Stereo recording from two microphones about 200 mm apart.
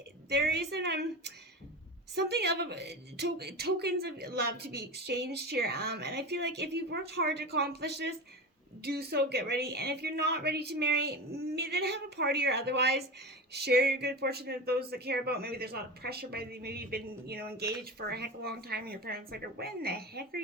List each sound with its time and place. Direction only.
0.3 s a woman's voice: 55° right (ahead or behind)